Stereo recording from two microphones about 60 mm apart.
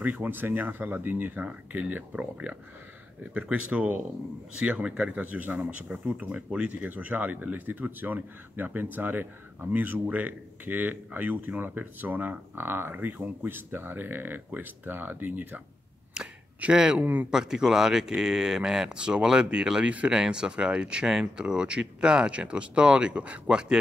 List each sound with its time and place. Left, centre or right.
0.0 s speech: right
16.1 s a sound: centre
16.7 s speech: centre
17.0 s speech: right
17.3 s speech: centre